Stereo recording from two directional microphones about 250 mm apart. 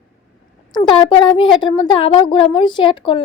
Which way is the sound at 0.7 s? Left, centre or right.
Centre.